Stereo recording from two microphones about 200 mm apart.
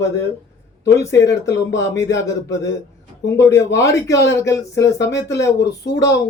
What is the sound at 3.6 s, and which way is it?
Speech, 15° left (ahead or behind).